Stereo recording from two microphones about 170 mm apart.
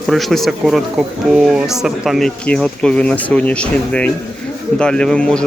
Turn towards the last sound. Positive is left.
turn(degrees=5)  # may be behind; listen again after turning